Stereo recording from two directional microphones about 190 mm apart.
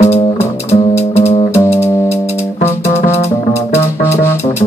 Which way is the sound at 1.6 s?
15° left (ahead or behind).